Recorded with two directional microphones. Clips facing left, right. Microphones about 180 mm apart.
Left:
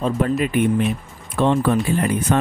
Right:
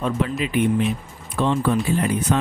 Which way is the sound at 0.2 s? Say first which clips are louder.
Left 3 dB; 50° left (ahead or behind).